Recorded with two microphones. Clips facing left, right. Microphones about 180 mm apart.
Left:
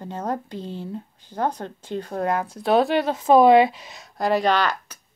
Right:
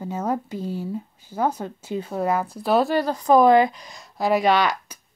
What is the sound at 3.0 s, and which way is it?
Speech, 25° left (ahead or behind).